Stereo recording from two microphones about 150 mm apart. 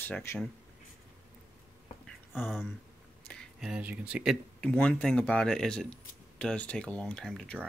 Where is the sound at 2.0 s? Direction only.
Centre (ahead or behind).